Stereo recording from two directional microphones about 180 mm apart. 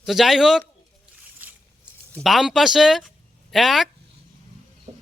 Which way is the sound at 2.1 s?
Centre (ahead or behind).